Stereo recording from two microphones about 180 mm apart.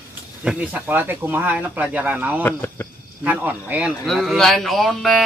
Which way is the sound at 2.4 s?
10° left (ahead or behind).